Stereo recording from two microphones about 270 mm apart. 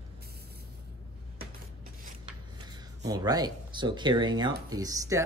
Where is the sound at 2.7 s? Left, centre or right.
Centre.